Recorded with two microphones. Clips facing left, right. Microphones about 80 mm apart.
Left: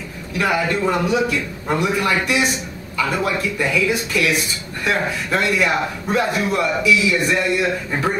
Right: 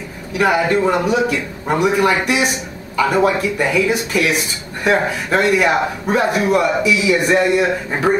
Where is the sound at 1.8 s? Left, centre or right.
Centre.